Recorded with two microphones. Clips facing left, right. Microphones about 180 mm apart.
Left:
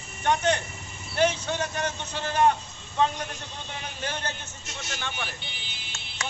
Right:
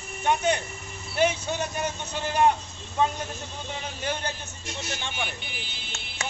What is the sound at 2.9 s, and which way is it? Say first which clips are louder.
Speech: even; 10° right (ahead or behind).